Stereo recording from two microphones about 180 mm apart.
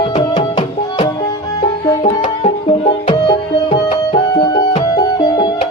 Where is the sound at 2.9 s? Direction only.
30° left (ahead or behind).